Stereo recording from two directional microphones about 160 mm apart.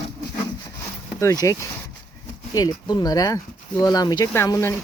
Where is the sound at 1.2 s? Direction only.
20° left (ahead or behind).